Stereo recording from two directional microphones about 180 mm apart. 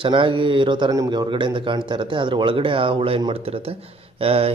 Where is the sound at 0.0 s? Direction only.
30° right (ahead or behind).